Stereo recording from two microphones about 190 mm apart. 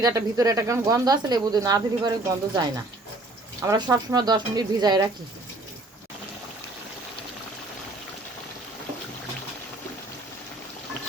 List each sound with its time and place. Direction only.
0.0 s speech: 20° right (ahead or behind)